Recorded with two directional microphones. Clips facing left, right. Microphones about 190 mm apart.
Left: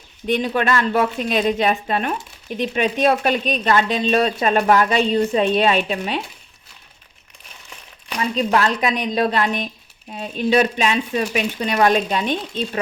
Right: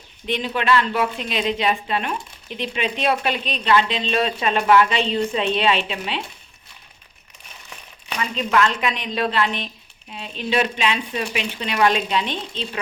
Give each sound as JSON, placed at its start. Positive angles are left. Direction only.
{"t": 0.3, "sound": "a woman's voice", "side_deg": 45}
{"t": 8.2, "sound": "a woman's voice", "side_deg": 35}